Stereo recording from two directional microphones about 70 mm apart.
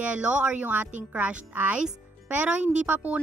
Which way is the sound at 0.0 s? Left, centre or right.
Centre.